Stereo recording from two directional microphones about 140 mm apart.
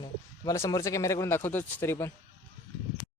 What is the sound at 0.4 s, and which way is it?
Speech, 20° left (ahead or behind).